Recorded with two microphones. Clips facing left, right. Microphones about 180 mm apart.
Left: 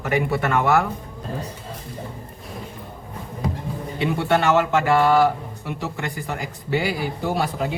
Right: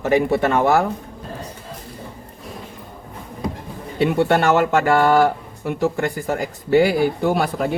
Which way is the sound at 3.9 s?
45° right (ahead or behind).